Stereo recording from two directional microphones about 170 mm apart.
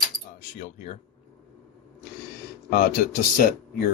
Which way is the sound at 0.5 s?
45° left (ahead or behind).